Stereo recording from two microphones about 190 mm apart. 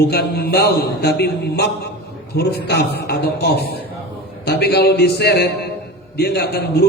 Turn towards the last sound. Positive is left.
turn(degrees=60)  # may be behind; listen again after turning